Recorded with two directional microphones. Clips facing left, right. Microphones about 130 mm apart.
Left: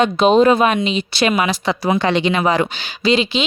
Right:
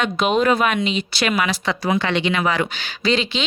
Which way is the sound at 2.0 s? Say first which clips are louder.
Left 4 dB; 40° left (ahead or behind).